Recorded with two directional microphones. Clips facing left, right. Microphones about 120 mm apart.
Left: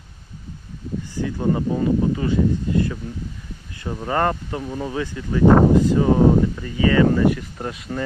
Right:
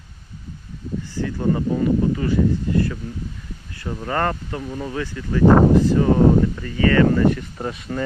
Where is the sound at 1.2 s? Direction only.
15° left (ahead or behind).